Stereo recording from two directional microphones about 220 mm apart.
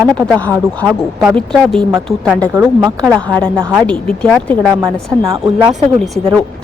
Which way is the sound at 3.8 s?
5° left (ahead or behind).